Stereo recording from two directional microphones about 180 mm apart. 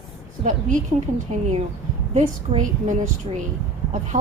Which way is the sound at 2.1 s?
40° right (ahead or behind).